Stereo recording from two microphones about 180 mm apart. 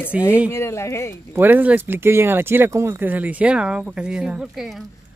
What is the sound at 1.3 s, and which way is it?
Speech, 10° right (ahead or behind).